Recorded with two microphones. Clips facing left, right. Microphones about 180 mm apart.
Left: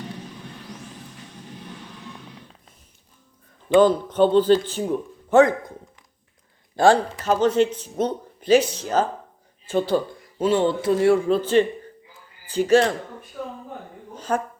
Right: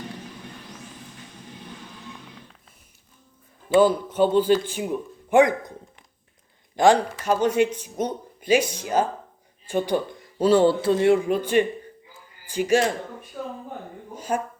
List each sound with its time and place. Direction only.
3.8 s a man's voice: 10° right (ahead or behind)
6.7 s a man's voice: 15° right (ahead or behind)
10.3 s a man's voice: 35° right (ahead or behind); by 12.9 s 10° right (ahead or behind)
14.1 s a man's voice: 10° right (ahead or behind)